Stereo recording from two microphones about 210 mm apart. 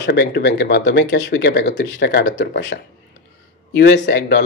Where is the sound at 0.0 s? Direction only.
55° left (ahead or behind).